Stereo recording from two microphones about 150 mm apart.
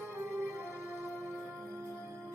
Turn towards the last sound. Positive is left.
turn(degrees=-15)  # may be behind; listen again after turning